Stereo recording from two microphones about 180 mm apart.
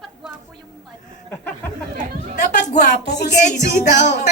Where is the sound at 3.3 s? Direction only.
40° left (ahead or behind).